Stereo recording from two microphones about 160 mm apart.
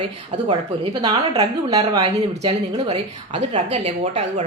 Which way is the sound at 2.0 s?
40° right (ahead or behind).